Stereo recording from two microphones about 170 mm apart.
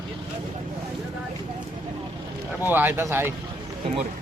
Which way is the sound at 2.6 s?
10° right (ahead or behind).